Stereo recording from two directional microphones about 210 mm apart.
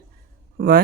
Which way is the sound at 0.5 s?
45° right (ahead or behind).